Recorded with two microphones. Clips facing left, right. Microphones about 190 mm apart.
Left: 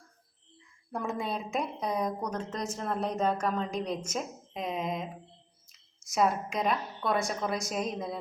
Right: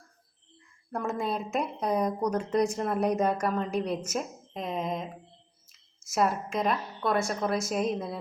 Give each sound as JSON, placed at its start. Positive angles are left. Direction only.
{"t": 0.9, "sound": "a woman's voice", "side_deg": 0}
{"t": 6.1, "sound": "a woman's voice", "side_deg": 0}